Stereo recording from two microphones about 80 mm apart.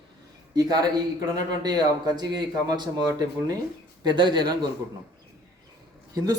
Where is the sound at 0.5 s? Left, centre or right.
Right.